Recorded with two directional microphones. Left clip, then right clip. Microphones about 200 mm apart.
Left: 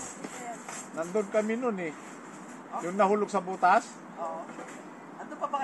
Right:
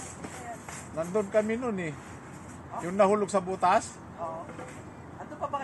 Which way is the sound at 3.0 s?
50° right (ahead or behind).